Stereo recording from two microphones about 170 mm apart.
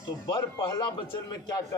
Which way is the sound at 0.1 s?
25° left (ahead or behind).